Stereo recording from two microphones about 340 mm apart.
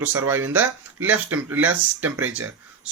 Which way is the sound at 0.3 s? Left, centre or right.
Centre.